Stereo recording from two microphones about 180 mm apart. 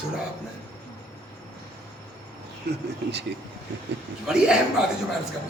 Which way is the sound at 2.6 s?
70° right (ahead or behind).